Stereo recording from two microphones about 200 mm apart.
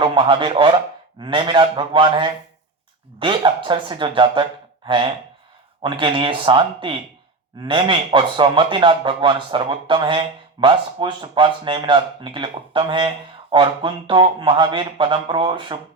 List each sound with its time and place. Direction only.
0.0 s speech: 25° right (ahead or behind)